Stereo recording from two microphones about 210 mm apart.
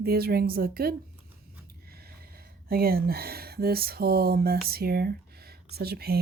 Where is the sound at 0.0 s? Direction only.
45° right (ahead or behind).